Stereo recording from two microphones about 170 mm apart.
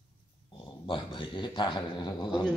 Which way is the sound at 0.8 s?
30° left (ahead or behind).